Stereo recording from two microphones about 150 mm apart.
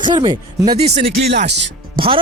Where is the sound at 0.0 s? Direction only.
30° right (ahead or behind).